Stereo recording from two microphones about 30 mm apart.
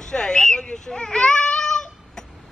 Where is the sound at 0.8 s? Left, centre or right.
Left.